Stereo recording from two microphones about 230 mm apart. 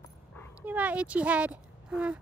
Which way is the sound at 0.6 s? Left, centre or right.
Centre.